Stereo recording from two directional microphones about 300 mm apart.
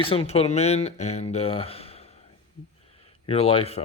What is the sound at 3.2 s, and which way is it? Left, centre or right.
Speech, centre.